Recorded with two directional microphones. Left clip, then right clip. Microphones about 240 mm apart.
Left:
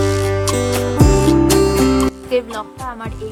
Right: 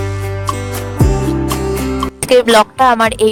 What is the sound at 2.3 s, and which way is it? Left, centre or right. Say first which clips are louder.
Speech: right 12 dB; right.